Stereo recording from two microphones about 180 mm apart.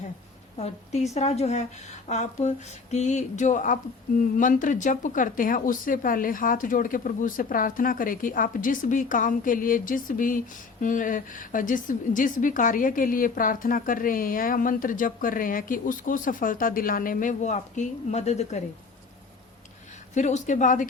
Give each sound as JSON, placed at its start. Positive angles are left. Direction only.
{"t": 0.5, "sound": "a woman's voice", "side_deg": 35}
{"t": 20.1, "sound": "a woman's voice", "side_deg": 40}